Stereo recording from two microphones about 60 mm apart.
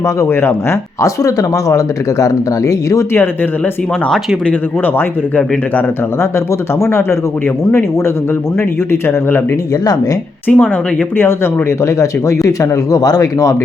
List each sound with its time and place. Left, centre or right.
0.3 s speech: left
1.0 s speech: left
6.7 s speech: left
10.5 s a woman's voice: centre
11.8 s speech: left